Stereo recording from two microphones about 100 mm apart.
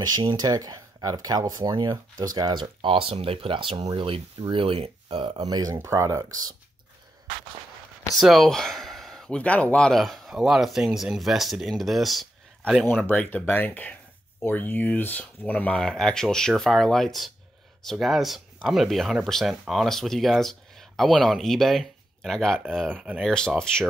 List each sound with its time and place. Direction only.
0.4 s speech: 40° right (ahead or behind); by 5.4 s 70° right (ahead or behind)
5.4 s speech: 40° right (ahead or behind)
5.8 s speech: 30° right (ahead or behind)
8.2 s speech: centre (ahead or behind)
13.0 s speech: 15° left (ahead or behind)
22.8 s speech: 15° right (ahead or behind)
23.2 s speech: 5° left (ahead or behind)